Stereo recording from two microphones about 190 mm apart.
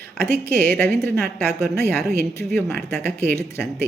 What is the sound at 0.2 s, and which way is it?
A woman's voice, 10° left (ahead or behind).